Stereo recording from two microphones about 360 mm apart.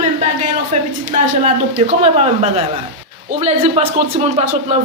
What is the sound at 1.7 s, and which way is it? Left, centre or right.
Speech, centre.